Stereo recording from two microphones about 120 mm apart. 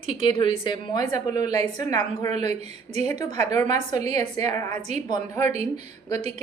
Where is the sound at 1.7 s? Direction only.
30° left (ahead or behind).